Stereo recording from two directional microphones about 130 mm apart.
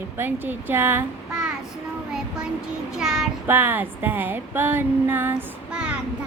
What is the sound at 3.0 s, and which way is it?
Child singing, 5° right (ahead or behind).